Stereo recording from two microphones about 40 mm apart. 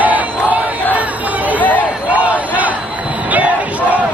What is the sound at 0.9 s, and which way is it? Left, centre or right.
Chatter, right.